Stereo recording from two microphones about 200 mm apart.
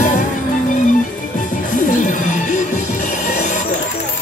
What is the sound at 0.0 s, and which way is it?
Music, 40° left (ahead or behind).